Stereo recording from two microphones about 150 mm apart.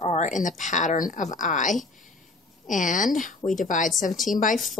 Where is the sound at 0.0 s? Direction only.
50° left (ahead or behind).